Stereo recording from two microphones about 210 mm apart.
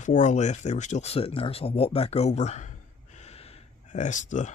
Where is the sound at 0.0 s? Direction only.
35° left (ahead or behind).